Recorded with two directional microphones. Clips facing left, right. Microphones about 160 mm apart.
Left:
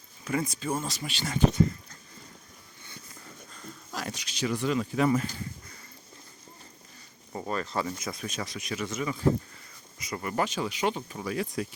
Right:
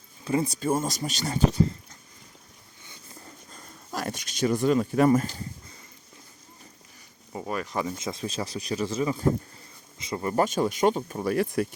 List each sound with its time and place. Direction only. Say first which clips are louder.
0.3 s speech: right 5 dB; 30° right (ahead or behind)
3.5 s a sound: right 4 dB; 50° right (ahead or behind)
7.3 s speech: right 1 dB; 10° right (ahead or behind)
7.9 s speech: right 4 dB; 25° right (ahead or behind)
10.3 s speech: right 6 dB; 45° right (ahead or behind)